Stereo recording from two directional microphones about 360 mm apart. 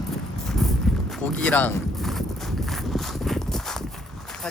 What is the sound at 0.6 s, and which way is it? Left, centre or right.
Horse, centre.